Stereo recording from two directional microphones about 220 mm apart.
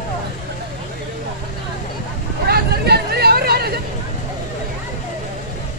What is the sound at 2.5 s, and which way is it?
Hubbub, 45° right (ahead or behind).